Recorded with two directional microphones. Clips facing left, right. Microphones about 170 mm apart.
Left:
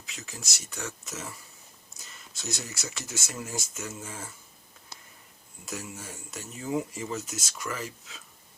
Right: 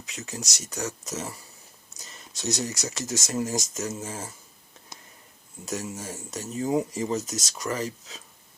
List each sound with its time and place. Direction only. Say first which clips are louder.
0.2 s speech: right 7 dB; 40° right (ahead or behind)
5.6 s speech: right 6 dB; 40° right (ahead or behind)